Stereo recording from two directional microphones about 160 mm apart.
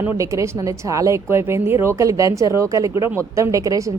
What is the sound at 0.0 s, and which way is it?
A woman's voice, 15° right (ahead or behind).